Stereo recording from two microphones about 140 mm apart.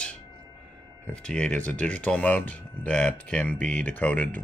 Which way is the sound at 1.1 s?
5° left (ahead or behind).